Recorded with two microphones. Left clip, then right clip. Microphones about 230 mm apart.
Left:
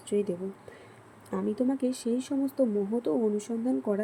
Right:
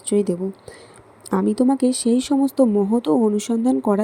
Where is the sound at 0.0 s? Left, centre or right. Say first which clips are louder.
Right 9 dB; right.